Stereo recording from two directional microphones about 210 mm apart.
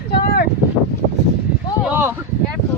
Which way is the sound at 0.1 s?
45° left (ahead or behind).